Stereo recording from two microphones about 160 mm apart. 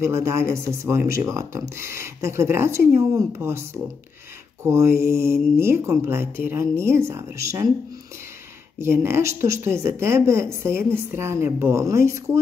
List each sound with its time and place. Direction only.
0.0 s speech: 15° right (ahead or behind)
8.7 s speech: 15° right (ahead or behind)